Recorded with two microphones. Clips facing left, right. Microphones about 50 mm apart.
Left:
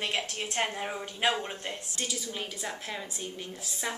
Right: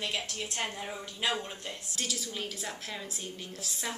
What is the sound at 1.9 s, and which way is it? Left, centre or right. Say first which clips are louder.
A woman's voice: right 1 dB; centre.